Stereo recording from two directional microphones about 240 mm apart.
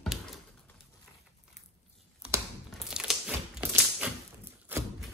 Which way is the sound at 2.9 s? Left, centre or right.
Centre.